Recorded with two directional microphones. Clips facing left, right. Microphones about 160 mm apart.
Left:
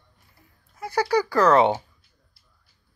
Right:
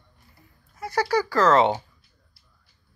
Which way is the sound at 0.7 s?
10° left (ahead or behind).